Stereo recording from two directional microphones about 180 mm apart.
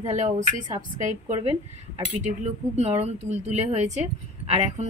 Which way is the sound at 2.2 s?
40° right (ahead or behind).